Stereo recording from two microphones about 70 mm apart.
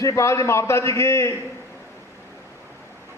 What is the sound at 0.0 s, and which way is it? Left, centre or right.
A man's voice, left.